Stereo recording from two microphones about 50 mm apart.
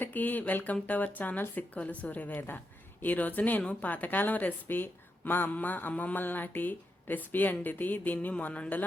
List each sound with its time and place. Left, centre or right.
0.0 s speech: left
5.9 s a sound: left
6.1 s speech: left